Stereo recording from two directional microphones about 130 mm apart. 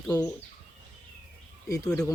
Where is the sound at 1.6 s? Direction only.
25° left (ahead or behind).